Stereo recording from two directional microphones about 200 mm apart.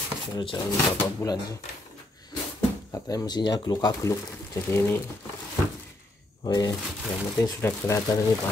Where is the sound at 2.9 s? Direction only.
20° left (ahead or behind).